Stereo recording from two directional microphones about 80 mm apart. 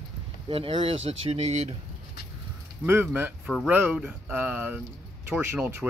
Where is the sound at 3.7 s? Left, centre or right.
Centre.